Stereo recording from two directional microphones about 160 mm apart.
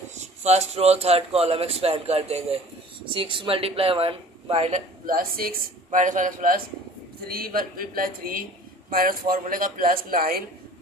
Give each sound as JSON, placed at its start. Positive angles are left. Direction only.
{"t": 0.4, "sound": "a man's voice", "side_deg": -40}
{"t": 5.0, "sound": "speech", "side_deg": -60}
{"t": 7.2, "sound": "speech", "side_deg": -70}